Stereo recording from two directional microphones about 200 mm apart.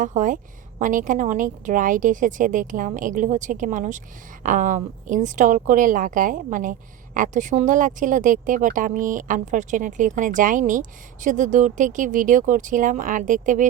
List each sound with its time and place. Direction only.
0.0 s a woman's voice: 40° right (ahead or behind)